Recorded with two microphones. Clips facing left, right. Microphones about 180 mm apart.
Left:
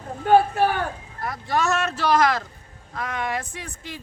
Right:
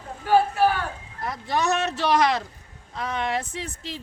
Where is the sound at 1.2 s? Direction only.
20° right (ahead or behind).